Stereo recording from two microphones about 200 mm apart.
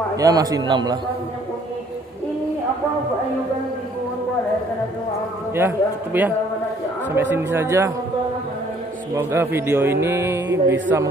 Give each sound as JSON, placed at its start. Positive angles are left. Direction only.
{"t": 0.1, "sound": "a man's voice", "side_deg": -20}
{"t": 5.5, "sound": "speech", "side_deg": -10}
{"t": 7.3, "sound": "speech", "side_deg": -15}
{"t": 9.1, "sound": "speech", "side_deg": -10}